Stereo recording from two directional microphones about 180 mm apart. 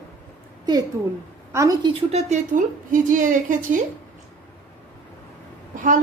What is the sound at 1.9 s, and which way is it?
A woman's voice, 35° right (ahead or behind).